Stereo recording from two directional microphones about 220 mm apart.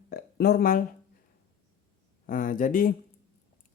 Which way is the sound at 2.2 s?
40° left (ahead or behind).